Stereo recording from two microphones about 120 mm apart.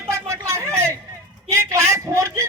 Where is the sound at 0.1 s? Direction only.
25° right (ahead or behind).